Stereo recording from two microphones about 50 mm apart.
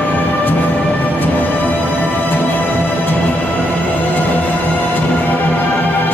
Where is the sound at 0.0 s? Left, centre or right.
Left.